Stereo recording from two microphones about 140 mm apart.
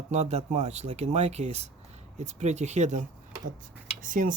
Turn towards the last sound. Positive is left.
turn(degrees=-70)  # may be behind; listen again after turning